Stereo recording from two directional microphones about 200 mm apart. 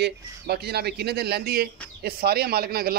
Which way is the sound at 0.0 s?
55° right (ahead or behind).